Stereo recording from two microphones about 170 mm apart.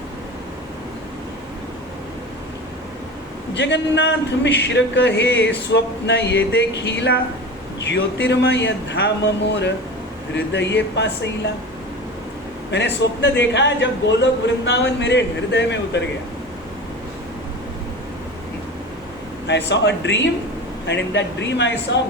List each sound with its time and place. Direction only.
3.5 s a man's voice: 90° left
12.7 s a man's voice: 90° left
19.5 s a man's voice: 90° left